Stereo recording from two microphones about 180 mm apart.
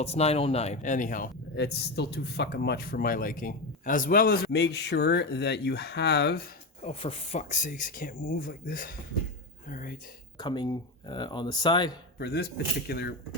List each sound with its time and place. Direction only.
0.0 s speech: 35° left (ahead or behind)
1.5 s a man's voice: 65° left (ahead or behind)
6.8 s speech: 35° left (ahead or behind); by 9.0 s 50° left (ahead or behind)
9.6 s whispering: 50° left (ahead or behind)
10.3 s speech: 25° left (ahead or behind)
12.2 s a man's voice: 60° left (ahead or behind)